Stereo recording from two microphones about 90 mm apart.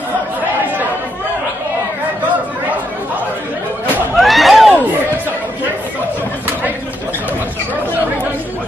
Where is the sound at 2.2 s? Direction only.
20° right (ahead or behind).